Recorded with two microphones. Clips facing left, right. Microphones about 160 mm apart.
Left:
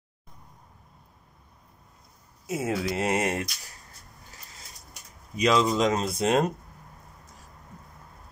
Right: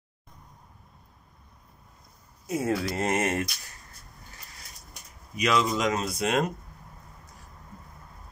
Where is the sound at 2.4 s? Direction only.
5° left (ahead or behind).